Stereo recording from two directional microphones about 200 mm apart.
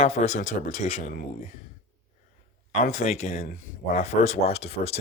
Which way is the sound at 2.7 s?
35° left (ahead or behind).